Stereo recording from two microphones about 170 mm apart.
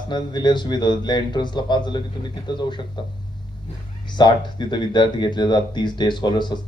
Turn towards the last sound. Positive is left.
turn(degrees=25)  # may be behind; listen again after turning